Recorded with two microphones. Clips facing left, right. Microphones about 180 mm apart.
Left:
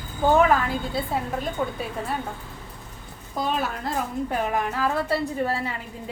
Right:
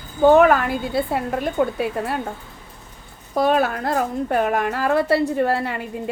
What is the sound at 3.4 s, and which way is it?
A woman's voice, 65° right (ahead or behind).